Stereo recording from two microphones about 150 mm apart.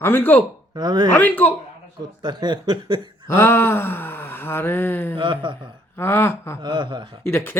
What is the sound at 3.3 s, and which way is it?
Gasp, 15° left (ahead or behind).